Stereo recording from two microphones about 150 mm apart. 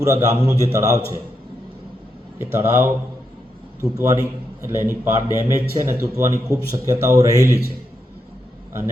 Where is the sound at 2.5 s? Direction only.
15° right (ahead or behind).